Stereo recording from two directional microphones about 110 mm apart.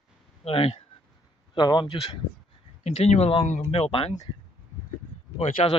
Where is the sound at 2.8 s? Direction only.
85° left.